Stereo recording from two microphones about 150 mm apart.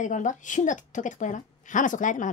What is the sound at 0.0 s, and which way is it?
A woman's voice, 55° left (ahead or behind).